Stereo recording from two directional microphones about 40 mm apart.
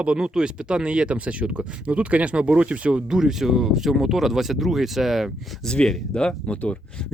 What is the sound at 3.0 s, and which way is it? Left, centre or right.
Speech, centre.